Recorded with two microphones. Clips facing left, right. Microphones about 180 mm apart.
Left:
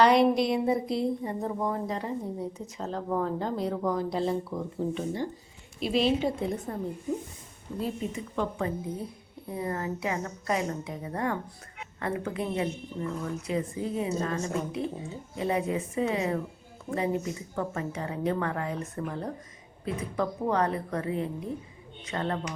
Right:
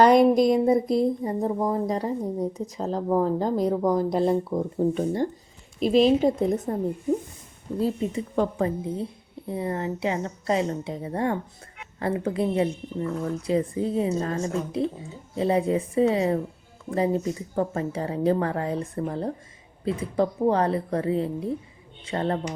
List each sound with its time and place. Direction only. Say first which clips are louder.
0.0 s speech: right 5 dB; 45° right (ahead or behind)
8.1 s a woman's voice: right 6 dB; 35° right (ahead or behind)